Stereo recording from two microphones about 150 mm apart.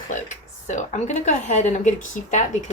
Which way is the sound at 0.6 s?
55° left (ahead or behind).